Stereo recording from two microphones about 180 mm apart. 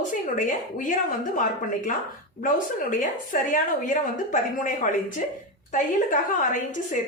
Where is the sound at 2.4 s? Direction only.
45° left (ahead or behind).